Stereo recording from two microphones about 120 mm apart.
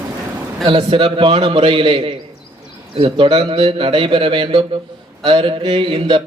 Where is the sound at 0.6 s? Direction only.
50° right (ahead or behind).